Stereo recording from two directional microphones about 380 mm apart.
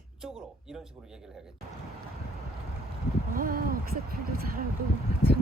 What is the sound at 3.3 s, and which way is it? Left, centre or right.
Speech, right.